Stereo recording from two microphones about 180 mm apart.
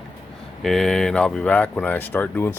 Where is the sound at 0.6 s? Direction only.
Centre (ahead or behind).